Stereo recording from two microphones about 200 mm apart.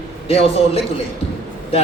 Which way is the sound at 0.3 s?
30° left (ahead or behind).